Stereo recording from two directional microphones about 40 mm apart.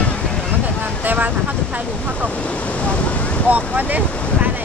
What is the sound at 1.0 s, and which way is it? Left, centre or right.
Vehicle, right.